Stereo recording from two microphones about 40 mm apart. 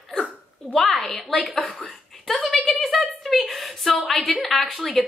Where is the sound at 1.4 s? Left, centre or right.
Left.